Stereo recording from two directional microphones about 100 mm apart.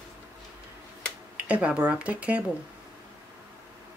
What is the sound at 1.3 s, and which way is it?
Speech, 15° right (ahead or behind).